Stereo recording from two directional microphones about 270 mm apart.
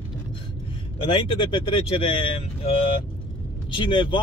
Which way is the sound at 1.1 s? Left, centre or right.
Centre.